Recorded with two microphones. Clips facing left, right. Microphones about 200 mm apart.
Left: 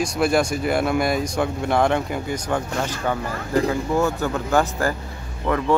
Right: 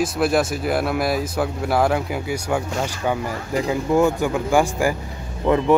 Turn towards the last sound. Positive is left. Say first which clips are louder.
# right 4 dB
turn(degrees=-20)  # may be behind; listen again after turning